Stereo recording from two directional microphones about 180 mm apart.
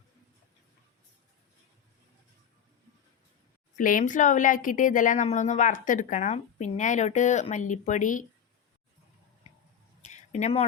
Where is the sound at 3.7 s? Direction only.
45° left (ahead or behind).